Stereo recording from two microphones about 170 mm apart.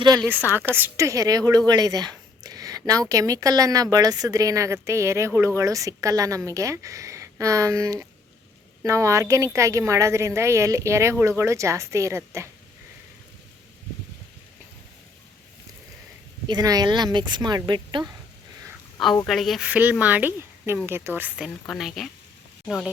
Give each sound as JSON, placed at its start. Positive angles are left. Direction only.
{"t": 0.5, "sound": "a woman's voice", "side_deg": -10}
{"t": 16.5, "sound": "a woman's voice", "side_deg": -25}
{"t": 19.2, "sound": "a woman's voice", "side_deg": 0}